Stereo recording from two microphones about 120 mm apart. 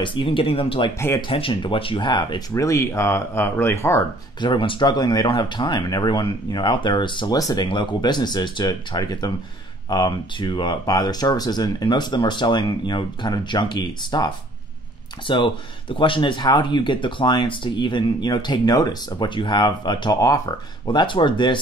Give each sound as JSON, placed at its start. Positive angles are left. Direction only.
{"t": 0.0, "sound": "speech", "side_deg": 45}
{"t": 0.9, "sound": "speech", "side_deg": 25}
{"t": 1.2, "sound": "speech", "side_deg": 45}
{"t": 2.5, "sound": "speech", "side_deg": 25}
{"t": 4.4, "sound": "speech", "side_deg": 45}
{"t": 7.6, "sound": "speech", "side_deg": 40}